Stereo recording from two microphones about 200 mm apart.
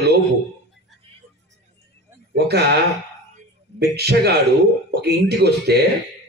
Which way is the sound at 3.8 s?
55° right (ahead or behind).